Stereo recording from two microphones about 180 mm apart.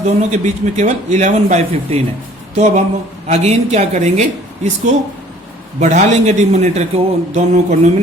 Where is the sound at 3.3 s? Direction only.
35° right (ahead or behind).